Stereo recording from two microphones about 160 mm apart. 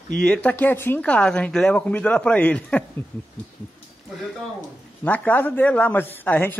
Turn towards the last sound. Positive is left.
turn(degrees=10)  # may be behind; listen again after turning